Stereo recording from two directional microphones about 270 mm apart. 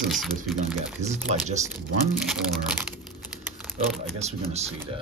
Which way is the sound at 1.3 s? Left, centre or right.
Right.